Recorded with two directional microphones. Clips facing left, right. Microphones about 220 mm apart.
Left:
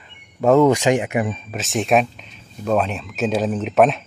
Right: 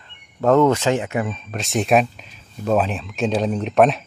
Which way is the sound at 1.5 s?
Centre (ahead or behind).